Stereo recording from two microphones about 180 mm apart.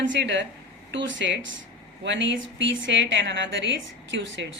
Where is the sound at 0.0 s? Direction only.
80° right.